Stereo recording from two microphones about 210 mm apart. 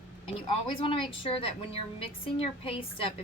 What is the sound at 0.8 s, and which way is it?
Speech, 25° left (ahead or behind).